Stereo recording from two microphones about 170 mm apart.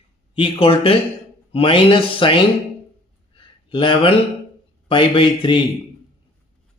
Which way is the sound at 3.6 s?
30° left (ahead or behind).